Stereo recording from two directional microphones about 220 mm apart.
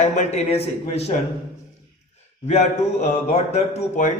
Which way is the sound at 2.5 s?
30° left (ahead or behind).